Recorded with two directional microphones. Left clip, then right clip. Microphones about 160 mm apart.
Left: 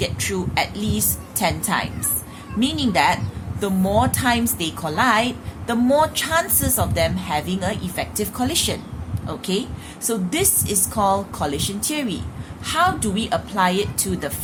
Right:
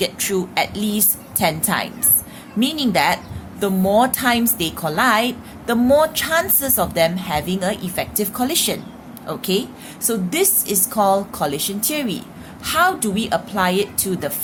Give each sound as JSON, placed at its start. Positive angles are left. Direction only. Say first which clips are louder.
{"t": 0.0, "sound": "a woman's voice", "louder": "right 3 dB", "side_deg": -30}